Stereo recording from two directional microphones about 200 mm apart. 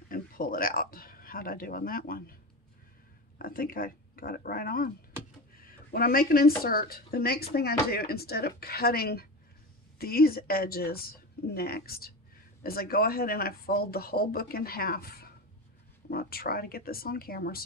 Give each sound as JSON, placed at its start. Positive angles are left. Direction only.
{"t": 0.1, "sound": "speech", "side_deg": 45}
{"t": 3.3, "sound": "speech", "side_deg": 45}
{"t": 5.9, "sound": "speech", "side_deg": 50}